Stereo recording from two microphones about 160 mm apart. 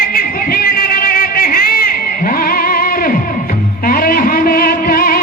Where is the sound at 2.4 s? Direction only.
65° left (ahead or behind).